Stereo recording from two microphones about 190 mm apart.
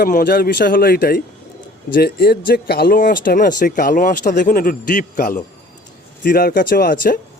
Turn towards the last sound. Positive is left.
turn(degrees=50)  # may be behind; listen again after turning